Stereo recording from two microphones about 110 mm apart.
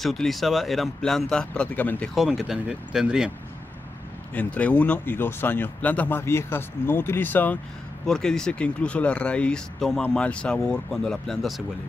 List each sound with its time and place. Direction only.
0.0 s speech: centre (ahead or behind)
2.1 s speech: 5° right (ahead or behind)
4.3 s speech: 15° left (ahead or behind)
8.1 s speech: 5° left (ahead or behind)